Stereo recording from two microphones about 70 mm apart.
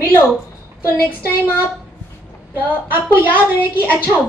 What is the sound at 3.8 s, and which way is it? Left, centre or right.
Speech, left.